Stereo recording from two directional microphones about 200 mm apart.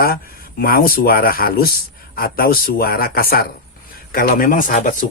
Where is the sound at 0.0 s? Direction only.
50° left (ahead or behind).